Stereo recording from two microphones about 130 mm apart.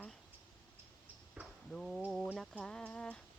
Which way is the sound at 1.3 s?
5° right (ahead or behind).